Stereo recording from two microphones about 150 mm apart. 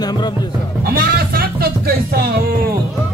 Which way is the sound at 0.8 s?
80° right.